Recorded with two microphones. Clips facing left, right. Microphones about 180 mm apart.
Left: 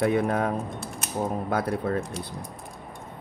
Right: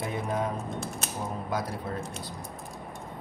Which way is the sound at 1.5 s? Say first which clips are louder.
Left 6 dB; 60° left (ahead or behind).